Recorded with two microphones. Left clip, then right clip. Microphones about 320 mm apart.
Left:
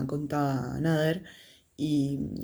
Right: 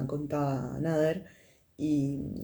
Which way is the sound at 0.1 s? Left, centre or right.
Left.